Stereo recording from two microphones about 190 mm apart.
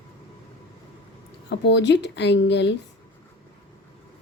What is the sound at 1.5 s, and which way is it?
Speech, 65° left (ahead or behind).